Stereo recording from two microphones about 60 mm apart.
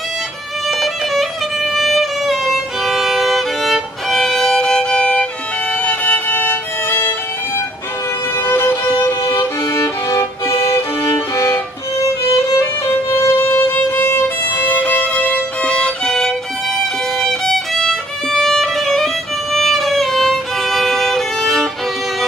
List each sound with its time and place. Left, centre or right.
0.7 s music: centre
5.9 s violin: left
8.5 s music: left
9.4 s music: left
13.2 s violin: left; by 21.6 s centre